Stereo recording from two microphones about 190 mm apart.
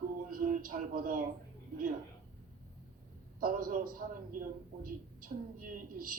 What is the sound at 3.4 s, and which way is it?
Speech, 50° right (ahead or behind).